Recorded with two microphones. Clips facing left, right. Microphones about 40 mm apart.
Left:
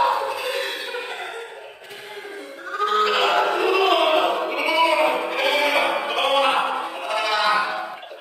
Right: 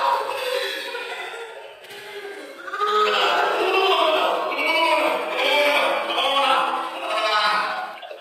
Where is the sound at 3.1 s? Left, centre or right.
Left.